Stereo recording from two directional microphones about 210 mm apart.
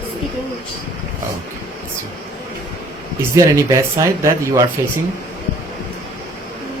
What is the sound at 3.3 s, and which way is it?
Speech, 15° right (ahead or behind).